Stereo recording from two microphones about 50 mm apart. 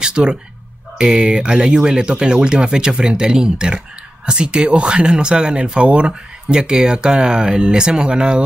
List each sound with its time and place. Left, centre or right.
0.0 s bow-wow: centre
0.9 s speech: centre